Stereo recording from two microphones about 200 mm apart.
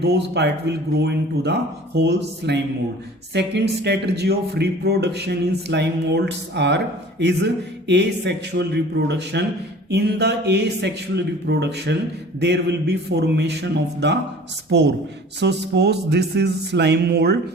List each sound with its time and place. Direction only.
0.0 s speech: 55° right (ahead or behind)